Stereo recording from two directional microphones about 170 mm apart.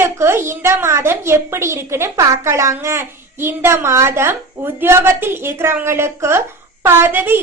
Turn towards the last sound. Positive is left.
turn(degrees=-10)  # may be behind; listen again after turning